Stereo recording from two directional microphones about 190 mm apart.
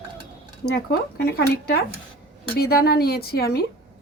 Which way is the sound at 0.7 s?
55° left (ahead or behind).